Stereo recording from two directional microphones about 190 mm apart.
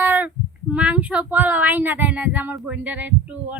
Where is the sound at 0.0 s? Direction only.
10° right (ahead or behind).